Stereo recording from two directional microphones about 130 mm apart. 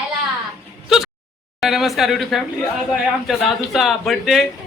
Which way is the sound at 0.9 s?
5° right (ahead or behind).